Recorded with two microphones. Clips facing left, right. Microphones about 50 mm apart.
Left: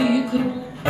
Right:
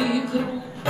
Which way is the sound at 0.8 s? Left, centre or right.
Left.